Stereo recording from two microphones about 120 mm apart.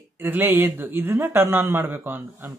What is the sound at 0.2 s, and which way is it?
Speech, 20° right (ahead or behind).